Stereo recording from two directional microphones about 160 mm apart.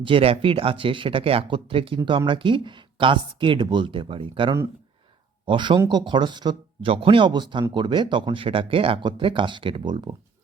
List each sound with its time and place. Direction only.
0.0 s speech: 35° right (ahead or behind)